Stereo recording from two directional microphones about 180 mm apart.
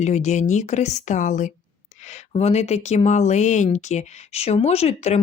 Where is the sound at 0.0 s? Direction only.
40° left (ahead or behind).